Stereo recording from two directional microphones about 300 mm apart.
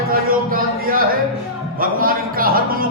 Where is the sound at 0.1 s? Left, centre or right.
Right.